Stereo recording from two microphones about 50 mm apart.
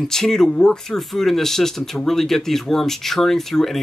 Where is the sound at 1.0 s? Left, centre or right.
Centre.